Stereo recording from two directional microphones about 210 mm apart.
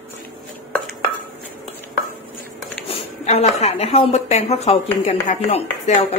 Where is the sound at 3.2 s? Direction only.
30° left (ahead or behind).